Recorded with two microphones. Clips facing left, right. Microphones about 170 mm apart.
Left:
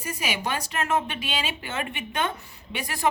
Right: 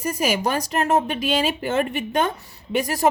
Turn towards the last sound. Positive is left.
turn(degrees=-40)  # may be behind; listen again after turning